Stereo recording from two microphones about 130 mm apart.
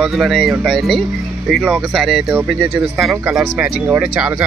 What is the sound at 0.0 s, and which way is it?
Speech, centre (ahead or behind).